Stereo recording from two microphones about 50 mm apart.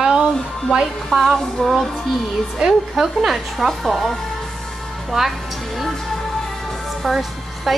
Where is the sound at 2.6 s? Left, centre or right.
Centre.